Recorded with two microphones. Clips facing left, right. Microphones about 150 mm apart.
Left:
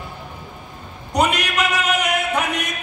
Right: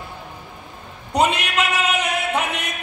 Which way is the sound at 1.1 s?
25° right (ahead or behind).